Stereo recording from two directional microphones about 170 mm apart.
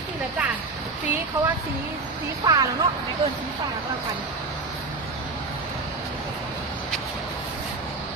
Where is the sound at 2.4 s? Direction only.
20° right (ahead or behind).